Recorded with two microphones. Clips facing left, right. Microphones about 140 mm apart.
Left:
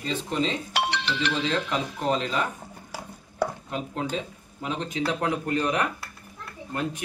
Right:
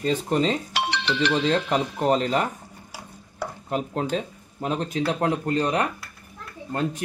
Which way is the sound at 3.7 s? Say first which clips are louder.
Right 4 dB; 45° right (ahead or behind).